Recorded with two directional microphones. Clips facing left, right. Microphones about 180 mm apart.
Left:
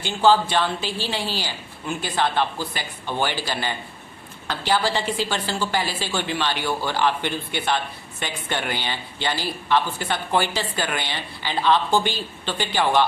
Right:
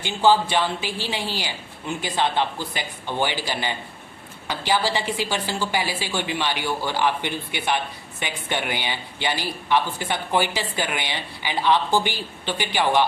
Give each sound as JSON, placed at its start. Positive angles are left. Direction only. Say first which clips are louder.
{"t": 0.0, "sound": "a woman's voice", "louder": "left 1 dB", "side_deg": -15}